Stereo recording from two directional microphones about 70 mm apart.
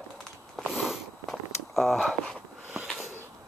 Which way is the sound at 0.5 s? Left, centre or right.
Centre.